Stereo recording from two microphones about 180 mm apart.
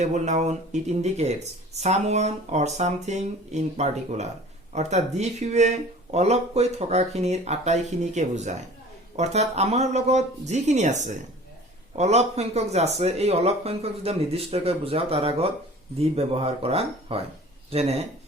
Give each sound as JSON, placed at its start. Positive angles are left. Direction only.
{"t": 0.0, "sound": "speech", "side_deg": -40}